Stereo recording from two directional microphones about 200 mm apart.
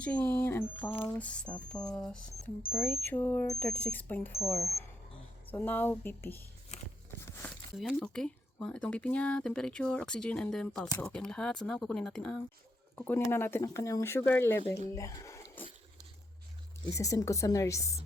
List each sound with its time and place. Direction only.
0.0 s speech: 5° left (ahead or behind)
7.2 s a sound: 10° left (ahead or behind)
7.5 s speech: centre (ahead or behind); by 15.4 s 15° left (ahead or behind)
15.6 s water: 10° left (ahead or behind)
16.9 s speech: 15° left (ahead or behind)